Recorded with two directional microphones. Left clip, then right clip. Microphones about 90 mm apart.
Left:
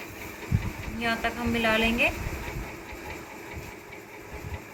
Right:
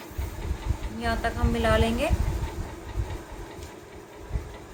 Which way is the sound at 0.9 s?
25° right (ahead or behind).